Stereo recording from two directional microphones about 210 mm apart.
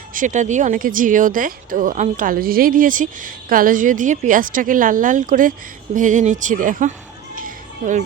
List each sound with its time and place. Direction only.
0.1 s speech: 35° right (ahead or behind)
7.3 s children playing: 40° right (ahead or behind)